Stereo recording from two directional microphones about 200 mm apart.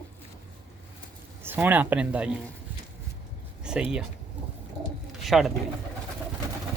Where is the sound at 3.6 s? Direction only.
5° right (ahead or behind).